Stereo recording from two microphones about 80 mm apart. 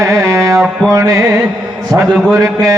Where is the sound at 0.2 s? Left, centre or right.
Right.